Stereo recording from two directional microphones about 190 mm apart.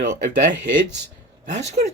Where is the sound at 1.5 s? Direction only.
35° right (ahead or behind).